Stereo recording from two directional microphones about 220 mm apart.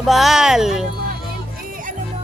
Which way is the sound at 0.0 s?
Centre (ahead or behind).